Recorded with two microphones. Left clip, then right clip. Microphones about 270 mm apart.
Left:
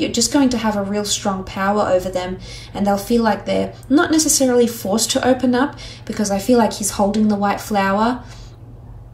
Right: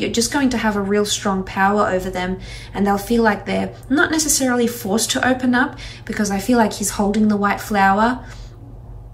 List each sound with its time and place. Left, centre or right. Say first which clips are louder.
0.0 s a woman's voice: left 2 dB; centre